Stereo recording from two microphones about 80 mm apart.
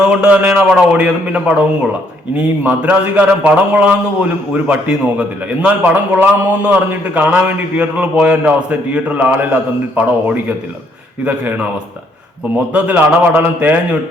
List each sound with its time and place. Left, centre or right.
0.0 s a man's voice: centre
12.7 s a man's voice: centre